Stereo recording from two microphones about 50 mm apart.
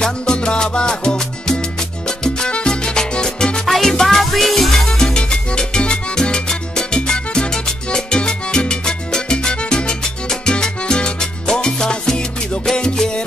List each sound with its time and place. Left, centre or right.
0.0 s salsa music: centre
3.7 s music: centre